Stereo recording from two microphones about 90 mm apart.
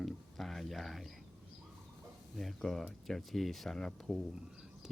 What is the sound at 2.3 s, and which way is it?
Speech, 5° left (ahead or behind).